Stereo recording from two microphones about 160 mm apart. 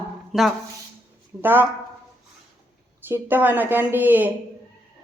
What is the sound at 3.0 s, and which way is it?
A woman's voice, 15° right (ahead or behind).